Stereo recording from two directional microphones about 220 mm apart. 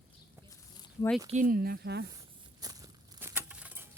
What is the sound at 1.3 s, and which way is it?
Speech, 35° right (ahead or behind).